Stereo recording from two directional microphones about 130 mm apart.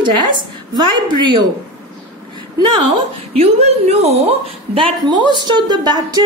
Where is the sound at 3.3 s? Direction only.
55° right (ahead or behind).